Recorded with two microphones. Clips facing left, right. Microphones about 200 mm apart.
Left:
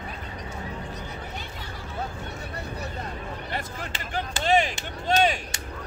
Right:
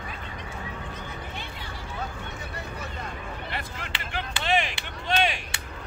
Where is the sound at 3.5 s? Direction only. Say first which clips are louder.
Left 2 dB; 40° left (ahead or behind).